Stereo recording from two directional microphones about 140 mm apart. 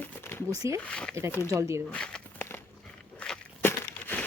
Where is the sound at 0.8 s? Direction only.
5° left (ahead or behind).